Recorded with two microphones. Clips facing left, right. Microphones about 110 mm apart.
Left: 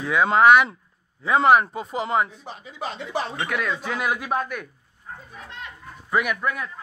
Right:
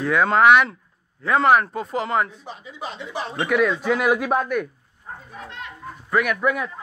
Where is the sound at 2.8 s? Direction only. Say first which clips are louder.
Left 2 dB; 75° left (ahead or behind).